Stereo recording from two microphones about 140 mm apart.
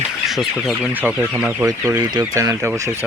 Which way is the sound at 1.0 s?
15° right (ahead or behind).